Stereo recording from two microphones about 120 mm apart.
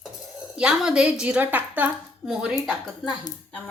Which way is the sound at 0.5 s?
5° right (ahead or behind).